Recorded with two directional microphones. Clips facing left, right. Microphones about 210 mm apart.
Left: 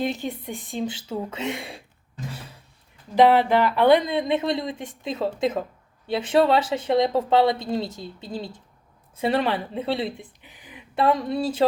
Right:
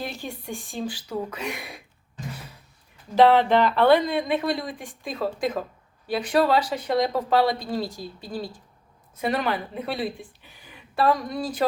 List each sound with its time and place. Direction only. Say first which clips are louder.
0.0 s speech: left 6 dB; 20° left (ahead or behind)
3.2 s a woman's voice: even; 10° left (ahead or behind)